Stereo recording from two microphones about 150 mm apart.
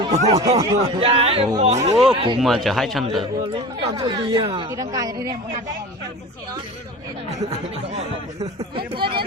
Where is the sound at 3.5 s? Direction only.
30° right (ahead or behind).